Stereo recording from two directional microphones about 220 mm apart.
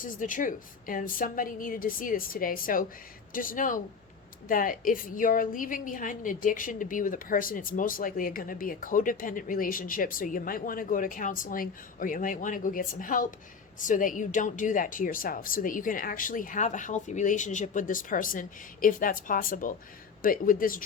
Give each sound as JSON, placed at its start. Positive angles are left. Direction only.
{"t": 0.0, "sound": "a woman's voice", "side_deg": 35}